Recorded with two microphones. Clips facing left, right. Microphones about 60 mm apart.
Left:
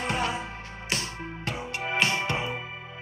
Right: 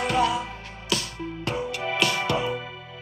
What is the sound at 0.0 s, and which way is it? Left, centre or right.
Music, left.